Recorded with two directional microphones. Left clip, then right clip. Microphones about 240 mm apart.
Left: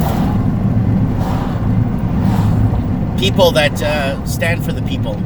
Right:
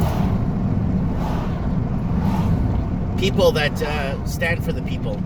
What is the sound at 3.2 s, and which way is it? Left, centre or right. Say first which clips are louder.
Speech: left 6 dB; centre.